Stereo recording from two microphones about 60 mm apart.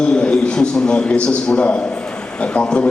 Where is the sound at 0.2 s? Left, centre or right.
Centre.